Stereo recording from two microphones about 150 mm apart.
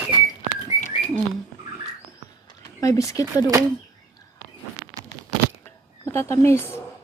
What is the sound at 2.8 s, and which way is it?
Speech, 20° left (ahead or behind).